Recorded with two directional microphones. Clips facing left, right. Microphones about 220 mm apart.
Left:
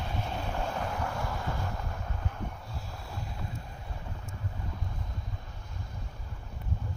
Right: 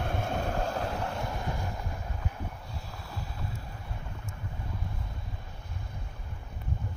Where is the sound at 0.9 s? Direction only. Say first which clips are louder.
Right 1 dB; 30° right (ahead or behind).